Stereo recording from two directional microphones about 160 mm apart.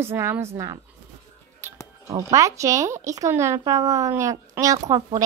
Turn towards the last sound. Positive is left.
turn(degrees=-20)  # may be behind; listen again after turning